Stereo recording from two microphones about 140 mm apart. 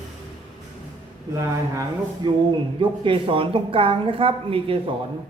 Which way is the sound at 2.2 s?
35° right (ahead or behind).